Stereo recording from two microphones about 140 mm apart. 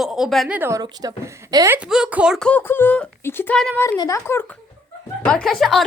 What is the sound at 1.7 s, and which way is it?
Speech, 5° right (ahead or behind).